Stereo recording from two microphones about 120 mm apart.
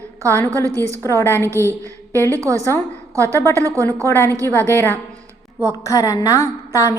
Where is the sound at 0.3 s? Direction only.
20° left (ahead or behind).